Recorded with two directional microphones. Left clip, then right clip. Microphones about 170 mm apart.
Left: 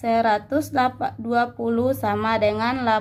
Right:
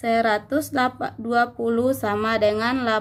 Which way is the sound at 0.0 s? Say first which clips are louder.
Left 1 dB; 20° right (ahead or behind).